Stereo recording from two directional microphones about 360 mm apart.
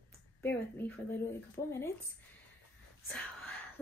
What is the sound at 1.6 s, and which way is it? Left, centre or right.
Speech, left.